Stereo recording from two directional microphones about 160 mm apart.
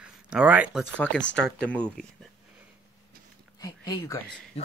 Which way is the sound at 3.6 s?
25° left (ahead or behind).